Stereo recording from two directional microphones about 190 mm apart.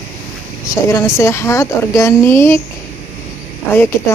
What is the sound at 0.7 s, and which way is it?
Speech, 15° left (ahead or behind).